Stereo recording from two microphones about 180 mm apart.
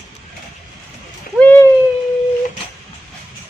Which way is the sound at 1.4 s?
10° left (ahead or behind).